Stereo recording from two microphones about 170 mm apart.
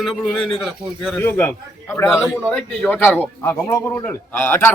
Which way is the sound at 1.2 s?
15° left (ahead or behind).